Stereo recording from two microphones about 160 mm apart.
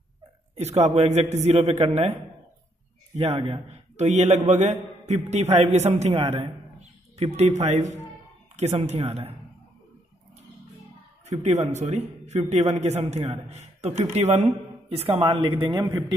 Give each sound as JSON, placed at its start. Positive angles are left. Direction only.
{"t": 0.6, "sound": "a man's voice", "side_deg": -45}
{"t": 3.2, "sound": "a man's voice", "side_deg": -40}
{"t": 11.4, "sound": "a man's voice", "side_deg": -45}